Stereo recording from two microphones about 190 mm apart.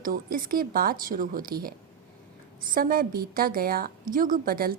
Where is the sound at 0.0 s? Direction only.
50° right (ahead or behind).